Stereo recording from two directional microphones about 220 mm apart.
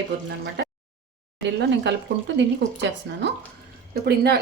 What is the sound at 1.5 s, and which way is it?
Speech, 50° right (ahead or behind).